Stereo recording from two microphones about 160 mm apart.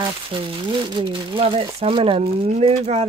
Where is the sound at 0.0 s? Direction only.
30° right (ahead or behind).